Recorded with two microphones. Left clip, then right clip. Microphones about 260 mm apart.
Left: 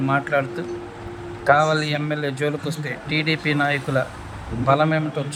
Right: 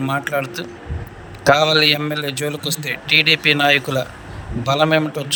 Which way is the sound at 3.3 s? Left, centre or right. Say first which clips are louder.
Right 4 dB; right.